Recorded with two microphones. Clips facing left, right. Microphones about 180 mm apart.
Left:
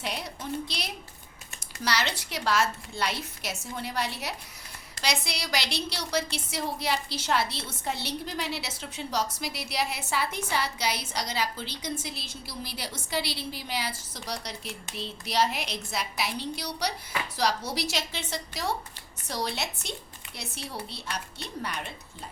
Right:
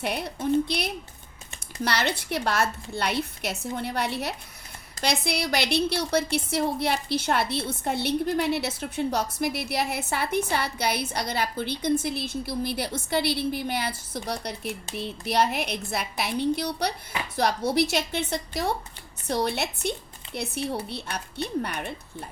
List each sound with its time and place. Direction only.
0.0 s a woman's voice: 55° right (ahead or behind)